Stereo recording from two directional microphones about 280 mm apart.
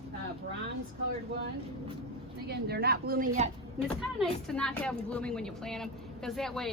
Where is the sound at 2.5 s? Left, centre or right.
Right.